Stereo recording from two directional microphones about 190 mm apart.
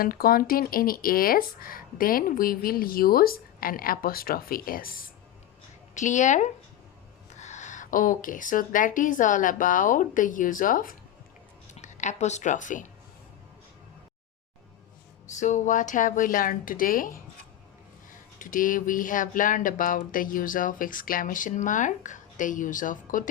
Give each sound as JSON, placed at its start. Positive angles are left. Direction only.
{"t": 0.0, "sound": "speech", "side_deg": 50}
{"t": 15.4, "sound": "speech", "side_deg": 40}